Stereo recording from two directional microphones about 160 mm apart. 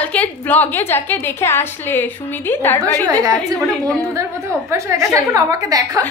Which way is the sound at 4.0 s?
20° right (ahead or behind).